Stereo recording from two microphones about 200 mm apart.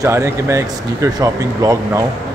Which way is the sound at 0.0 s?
15° right (ahead or behind).